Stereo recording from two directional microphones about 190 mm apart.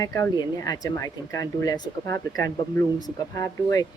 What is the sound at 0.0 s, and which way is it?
Speech, 20° left (ahead or behind).